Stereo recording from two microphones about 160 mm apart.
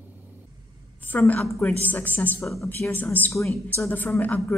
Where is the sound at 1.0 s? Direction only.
10° left (ahead or behind).